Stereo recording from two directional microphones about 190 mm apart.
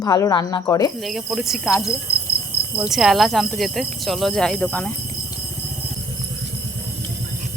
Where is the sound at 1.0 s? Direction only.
Centre (ahead or behind).